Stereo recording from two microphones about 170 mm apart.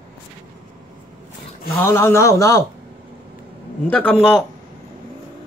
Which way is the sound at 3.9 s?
10° left (ahead or behind).